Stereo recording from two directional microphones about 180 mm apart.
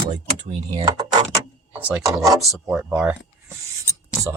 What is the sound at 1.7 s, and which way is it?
Speech, 10° right (ahead or behind).